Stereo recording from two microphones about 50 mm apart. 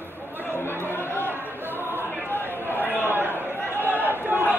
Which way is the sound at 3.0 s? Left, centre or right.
Right.